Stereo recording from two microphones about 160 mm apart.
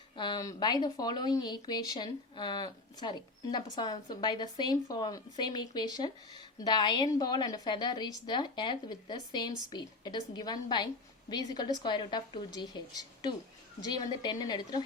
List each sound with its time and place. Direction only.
0.2 s speech: 25° left (ahead or behind)